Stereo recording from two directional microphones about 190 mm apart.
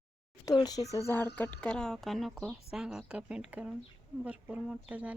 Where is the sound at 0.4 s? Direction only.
20° left (ahead or behind).